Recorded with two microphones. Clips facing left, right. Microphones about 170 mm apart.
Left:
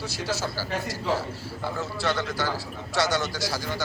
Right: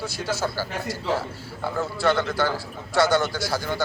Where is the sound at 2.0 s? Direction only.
55° right (ahead or behind).